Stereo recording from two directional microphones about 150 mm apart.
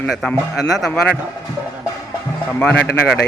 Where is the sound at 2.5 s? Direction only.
5° left (ahead or behind).